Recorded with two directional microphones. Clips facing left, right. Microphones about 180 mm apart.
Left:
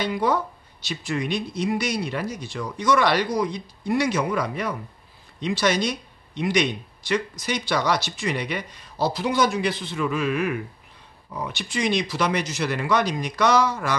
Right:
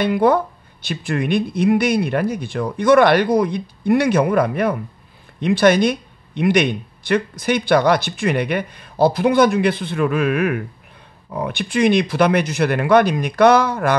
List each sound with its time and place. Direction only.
0.0 s speech: 55° right (ahead or behind)